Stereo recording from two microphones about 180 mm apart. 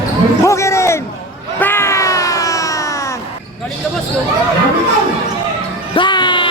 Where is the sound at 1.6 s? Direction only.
10° left (ahead or behind).